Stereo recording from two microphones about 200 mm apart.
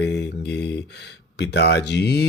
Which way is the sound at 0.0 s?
60° left (ahead or behind).